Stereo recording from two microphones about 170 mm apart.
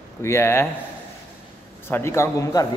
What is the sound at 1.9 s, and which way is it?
Speech, 15° left (ahead or behind).